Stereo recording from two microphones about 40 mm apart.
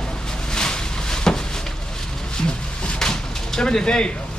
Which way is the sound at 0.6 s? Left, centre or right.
Centre.